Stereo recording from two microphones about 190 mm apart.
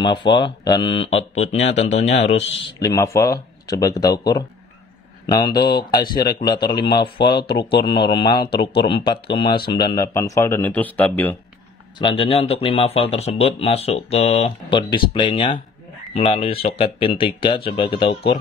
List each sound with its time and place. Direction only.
0.3 s speech: 25° left (ahead or behind)
2.8 s speech: 15° left (ahead or behind)
12.0 s speech: 25° left (ahead or behind)